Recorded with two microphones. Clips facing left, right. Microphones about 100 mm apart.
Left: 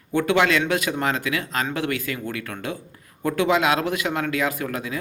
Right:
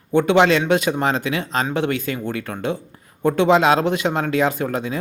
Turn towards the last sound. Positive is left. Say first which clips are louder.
# right 5 dB
turn(degrees=-25)  # may be behind; listen again after turning